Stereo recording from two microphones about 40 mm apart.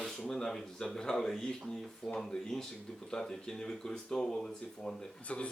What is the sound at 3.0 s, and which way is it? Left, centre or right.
Speech, centre.